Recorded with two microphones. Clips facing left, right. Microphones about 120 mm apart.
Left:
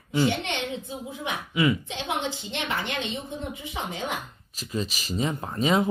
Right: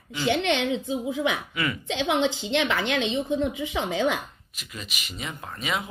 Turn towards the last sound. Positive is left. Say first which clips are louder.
# left 7 dB
turn(degrees=35)  # may be behind; listen again after turning